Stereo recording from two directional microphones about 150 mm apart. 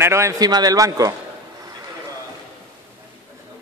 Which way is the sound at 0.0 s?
20° right (ahead or behind).